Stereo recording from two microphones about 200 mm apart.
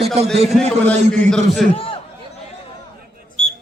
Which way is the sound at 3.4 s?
35° left (ahead or behind).